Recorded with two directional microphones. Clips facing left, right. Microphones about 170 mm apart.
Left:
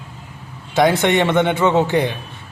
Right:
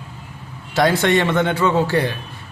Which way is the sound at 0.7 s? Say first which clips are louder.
Left 1 dB; 20° left (ahead or behind).